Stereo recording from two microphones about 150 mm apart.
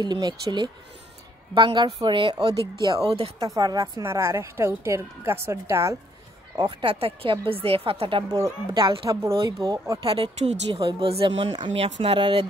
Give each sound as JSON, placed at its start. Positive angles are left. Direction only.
{"t": 0.0, "sound": "a woman's voice", "side_deg": -30}
{"t": 6.5, "sound": "a woman's voice", "side_deg": -30}
{"t": 6.9, "sound": "a woman's voice", "side_deg": -40}
{"t": 8.8, "sound": "a woman's voice", "side_deg": -35}
{"t": 9.2, "sound": "a woman's voice", "side_deg": -20}